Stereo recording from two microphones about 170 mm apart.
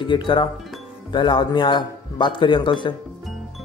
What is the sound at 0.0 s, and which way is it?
Speech, 30° left (ahead or behind).